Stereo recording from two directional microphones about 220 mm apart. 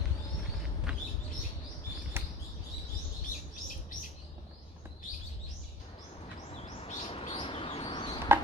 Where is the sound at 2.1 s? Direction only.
10° right (ahead or behind).